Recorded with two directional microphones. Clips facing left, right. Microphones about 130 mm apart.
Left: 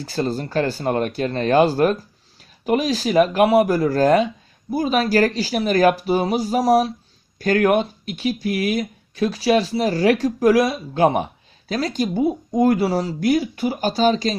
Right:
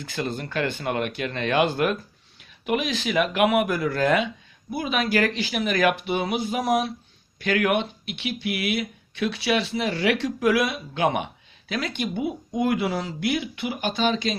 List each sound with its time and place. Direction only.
0.0 s speech: 35° left (ahead or behind)